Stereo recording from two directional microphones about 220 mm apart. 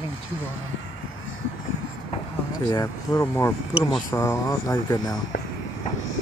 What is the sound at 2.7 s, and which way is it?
Speech, 15° left (ahead or behind).